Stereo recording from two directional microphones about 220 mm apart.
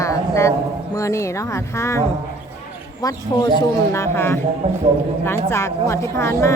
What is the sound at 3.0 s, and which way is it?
A woman's voice, 15° left (ahead or behind).